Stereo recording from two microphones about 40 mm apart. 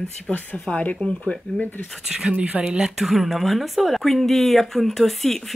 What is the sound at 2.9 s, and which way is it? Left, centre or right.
Speech, centre.